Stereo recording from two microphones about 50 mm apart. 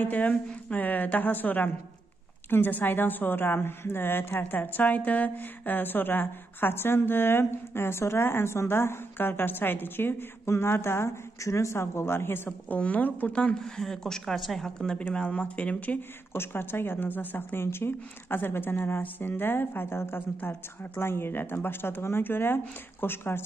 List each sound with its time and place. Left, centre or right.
0.0 s a woman's voice: left
10.5 s speech: left
12.6 s a woman's voice: left
13.3 s speech: left
13.6 s a woman's voice: centre
14.9 s speech: left
16.3 s a woman's voice: left